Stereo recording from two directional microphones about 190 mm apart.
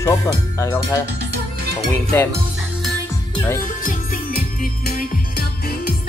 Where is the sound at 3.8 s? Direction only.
45° left (ahead or behind).